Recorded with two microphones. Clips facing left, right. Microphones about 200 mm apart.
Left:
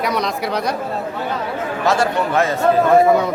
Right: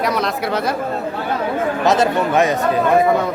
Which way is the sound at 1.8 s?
20° right (ahead or behind).